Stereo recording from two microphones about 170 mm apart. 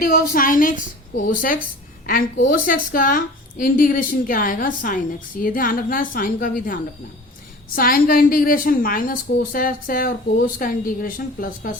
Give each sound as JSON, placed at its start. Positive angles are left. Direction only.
{"t": 0.0, "sound": "a woman's voice", "side_deg": 55}
{"t": 7.8, "sound": "a woman's voice", "side_deg": 60}